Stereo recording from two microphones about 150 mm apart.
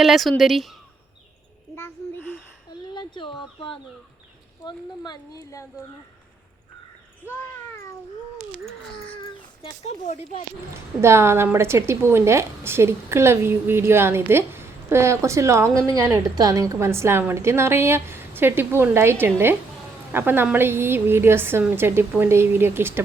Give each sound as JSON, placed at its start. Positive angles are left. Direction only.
{"t": 0.0, "sound": "speech", "side_deg": 0}
{"t": 1.7, "sound": "a sound", "side_deg": 15}
{"t": 2.9, "sound": "speech", "side_deg": 30}
{"t": 8.6, "sound": "a sound", "side_deg": 5}
{"t": 9.8, "sound": "speech", "side_deg": 50}
{"t": 11.0, "sound": "a woman's voice", "side_deg": -15}